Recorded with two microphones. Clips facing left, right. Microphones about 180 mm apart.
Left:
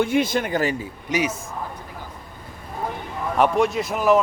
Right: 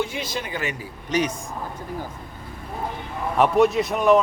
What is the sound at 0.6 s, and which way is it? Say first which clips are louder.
Speech: left 6 dB; 30° left (ahead or behind).